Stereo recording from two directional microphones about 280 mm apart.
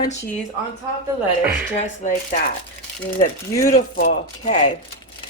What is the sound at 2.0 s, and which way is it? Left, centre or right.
Speech, left.